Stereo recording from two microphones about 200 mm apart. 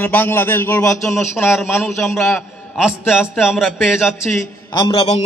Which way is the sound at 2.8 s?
5° right (ahead or behind).